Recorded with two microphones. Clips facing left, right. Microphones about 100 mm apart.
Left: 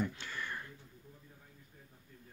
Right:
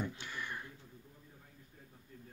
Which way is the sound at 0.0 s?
15° right (ahead or behind).